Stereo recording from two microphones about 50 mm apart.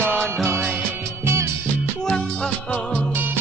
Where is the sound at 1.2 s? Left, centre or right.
Right.